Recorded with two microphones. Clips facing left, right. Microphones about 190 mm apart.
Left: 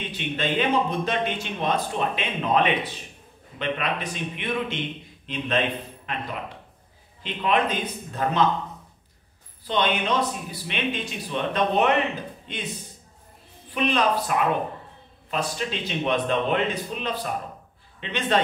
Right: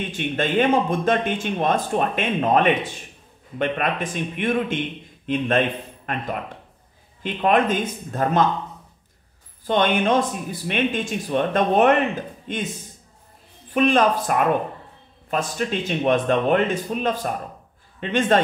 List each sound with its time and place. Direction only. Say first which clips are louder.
0.1 s speech: right 4 dB; 50° right (ahead or behind)
7.2 s speech: right 5 dB; 50° right (ahead or behind)
9.7 s speech: right 5 dB; 50° right (ahead or behind)
13.7 s speech: right 5 dB; 45° right (ahead or behind)